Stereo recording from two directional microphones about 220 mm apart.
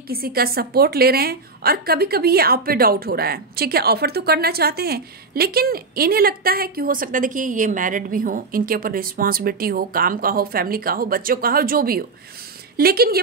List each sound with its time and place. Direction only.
0.1 s a woman's voice: 45° right (ahead or behind)